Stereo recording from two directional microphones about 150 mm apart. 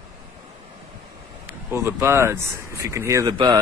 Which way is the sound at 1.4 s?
15° right (ahead or behind).